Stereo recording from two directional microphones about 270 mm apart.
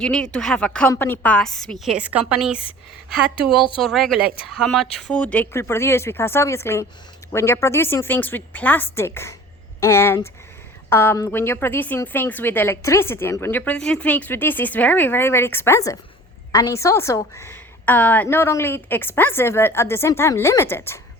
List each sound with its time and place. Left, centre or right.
0.0 s a woman's voice: centre
3.5 s a woman's voice: centre
3.8 s a woman's voice: centre